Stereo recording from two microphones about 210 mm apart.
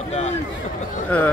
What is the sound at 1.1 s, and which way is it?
Speech, 5° left (ahead or behind).